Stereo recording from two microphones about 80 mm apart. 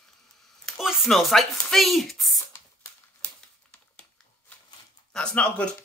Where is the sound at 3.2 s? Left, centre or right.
Centre.